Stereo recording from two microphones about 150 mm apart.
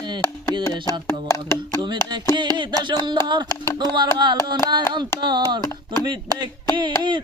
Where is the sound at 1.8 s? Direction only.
30° right (ahead or behind).